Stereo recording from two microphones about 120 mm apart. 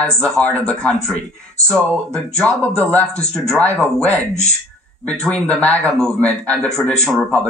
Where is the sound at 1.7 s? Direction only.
5° left (ahead or behind).